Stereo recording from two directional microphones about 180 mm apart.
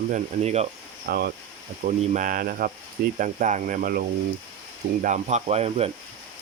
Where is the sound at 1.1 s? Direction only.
60° right (ahead or behind).